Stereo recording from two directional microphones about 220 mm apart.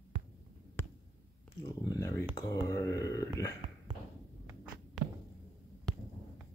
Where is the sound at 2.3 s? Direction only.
15° left (ahead or behind).